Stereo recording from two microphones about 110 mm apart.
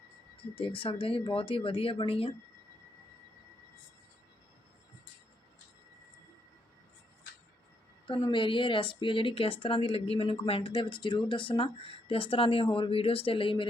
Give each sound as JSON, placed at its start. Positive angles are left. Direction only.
{"t": 0.5, "sound": "speech", "side_deg": 50}
{"t": 8.3, "sound": "speech", "side_deg": 50}